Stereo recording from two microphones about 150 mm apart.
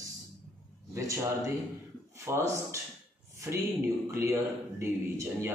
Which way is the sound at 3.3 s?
20° right (ahead or behind).